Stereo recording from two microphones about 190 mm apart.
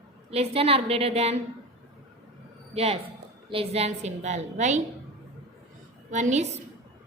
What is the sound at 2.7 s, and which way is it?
A woman's voice, 30° right (ahead or behind).